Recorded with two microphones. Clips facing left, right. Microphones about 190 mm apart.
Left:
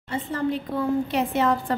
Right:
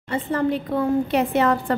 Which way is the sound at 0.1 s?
65° right (ahead or behind).